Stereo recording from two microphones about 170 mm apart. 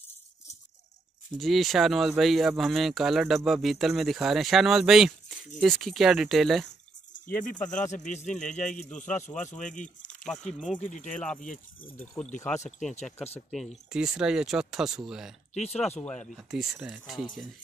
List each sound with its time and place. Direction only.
1.4 s speech: centre (ahead or behind)
7.2 s speech: 50° left (ahead or behind)
10.0 s speech: 5° left (ahead or behind)
10.8 s speech: 50° left (ahead or behind)
11.1 s speech: 5° left (ahead or behind)
11.3 s speech: 50° left (ahead or behind)
13.9 s speech: 5° right (ahead or behind)
15.5 s speech: 40° left (ahead or behind)
16.3 s speech: 5° right (ahead or behind)